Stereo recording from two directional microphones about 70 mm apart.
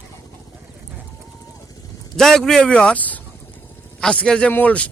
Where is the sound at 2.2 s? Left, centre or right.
Centre.